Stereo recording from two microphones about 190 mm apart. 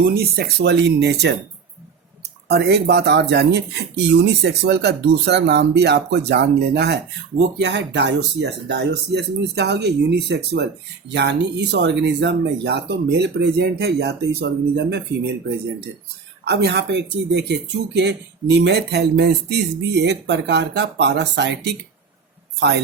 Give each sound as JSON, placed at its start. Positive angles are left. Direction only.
{"t": 0.0, "sound": "speech", "side_deg": -55}
{"t": 2.5, "sound": "speech", "side_deg": -60}
{"t": 16.5, "sound": "speech", "side_deg": -60}